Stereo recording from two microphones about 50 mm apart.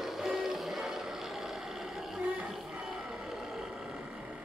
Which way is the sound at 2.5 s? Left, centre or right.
Centre.